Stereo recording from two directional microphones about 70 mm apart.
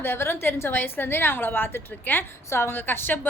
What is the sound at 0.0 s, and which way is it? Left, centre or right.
A woman's voice, left.